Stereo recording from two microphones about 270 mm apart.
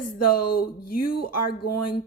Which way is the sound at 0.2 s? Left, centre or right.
Left.